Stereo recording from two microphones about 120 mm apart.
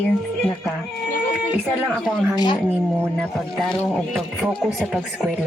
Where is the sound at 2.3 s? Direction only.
35° left (ahead or behind).